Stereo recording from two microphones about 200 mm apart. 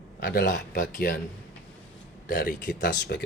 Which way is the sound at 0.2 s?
50° left (ahead or behind).